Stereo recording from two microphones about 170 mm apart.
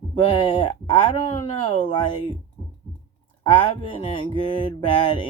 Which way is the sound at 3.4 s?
30° left (ahead or behind).